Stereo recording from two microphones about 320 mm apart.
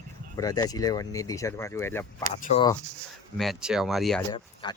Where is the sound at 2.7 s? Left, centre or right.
Centre.